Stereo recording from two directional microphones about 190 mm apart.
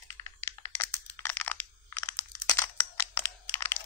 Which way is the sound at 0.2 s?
15° left (ahead or behind).